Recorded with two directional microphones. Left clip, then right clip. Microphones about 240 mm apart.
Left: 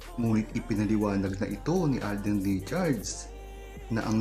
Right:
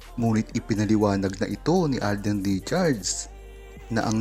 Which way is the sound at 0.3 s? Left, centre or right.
Right.